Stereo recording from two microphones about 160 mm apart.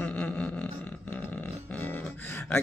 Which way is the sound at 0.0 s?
5° left (ahead or behind).